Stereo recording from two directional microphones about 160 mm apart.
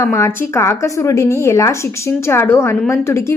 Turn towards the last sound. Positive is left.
turn(degrees=15)  # may be behind; listen again after turning